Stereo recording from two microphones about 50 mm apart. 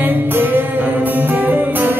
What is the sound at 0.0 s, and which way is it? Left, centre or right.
Music, right.